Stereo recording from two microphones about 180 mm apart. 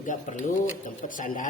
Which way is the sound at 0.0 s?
45° left (ahead or behind).